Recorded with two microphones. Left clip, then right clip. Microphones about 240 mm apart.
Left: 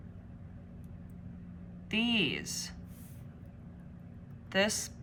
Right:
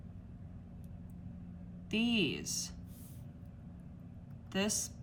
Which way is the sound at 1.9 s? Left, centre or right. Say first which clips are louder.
Left 3 dB; centre.